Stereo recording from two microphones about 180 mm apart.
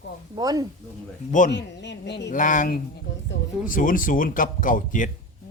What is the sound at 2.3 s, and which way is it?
Speech, 45° left (ahead or behind).